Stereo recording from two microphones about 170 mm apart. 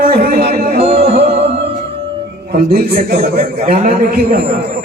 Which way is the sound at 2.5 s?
65° right (ahead or behind).